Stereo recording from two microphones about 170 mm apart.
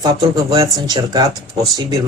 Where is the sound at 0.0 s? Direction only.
25° right (ahead or behind).